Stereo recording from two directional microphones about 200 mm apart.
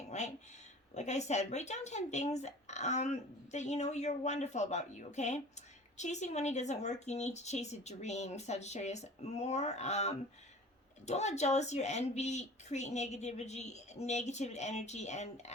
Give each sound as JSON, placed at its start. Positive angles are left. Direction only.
{"t": 0.1, "sound": "a woman's voice", "side_deg": 35}